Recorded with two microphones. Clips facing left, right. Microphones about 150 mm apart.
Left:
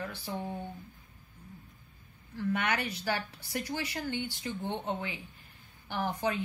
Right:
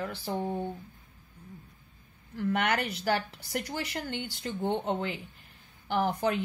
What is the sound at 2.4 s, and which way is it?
A woman's voice, 60° right (ahead or behind).